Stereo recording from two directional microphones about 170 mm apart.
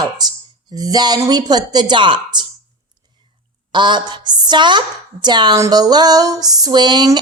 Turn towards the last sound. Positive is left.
turn(degrees=-25)  # may be behind; listen again after turning